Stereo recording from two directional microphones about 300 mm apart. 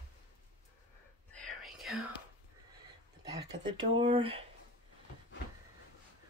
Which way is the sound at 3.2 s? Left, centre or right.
Centre.